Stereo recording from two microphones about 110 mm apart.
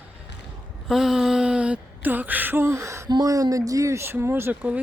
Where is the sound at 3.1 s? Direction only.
35° right (ahead or behind); by 4.8 s 20° right (ahead or behind).